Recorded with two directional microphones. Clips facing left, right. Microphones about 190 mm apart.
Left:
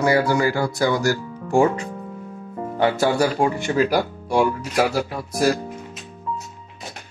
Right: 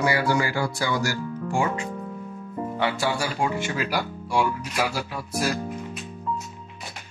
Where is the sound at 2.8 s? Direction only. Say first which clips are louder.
Left 8 dB; 45° left (ahead or behind).